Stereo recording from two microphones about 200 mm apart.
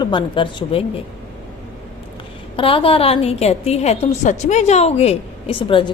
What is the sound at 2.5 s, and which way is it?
A woman's voice, 25° left (ahead or behind).